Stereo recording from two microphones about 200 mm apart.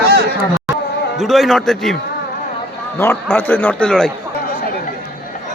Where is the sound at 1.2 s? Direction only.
Centre (ahead or behind).